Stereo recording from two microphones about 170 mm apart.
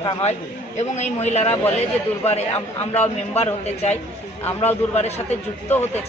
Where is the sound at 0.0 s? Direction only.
30° left (ahead or behind).